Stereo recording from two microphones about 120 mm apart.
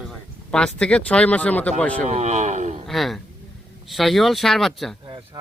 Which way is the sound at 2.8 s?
Centre (ahead or behind).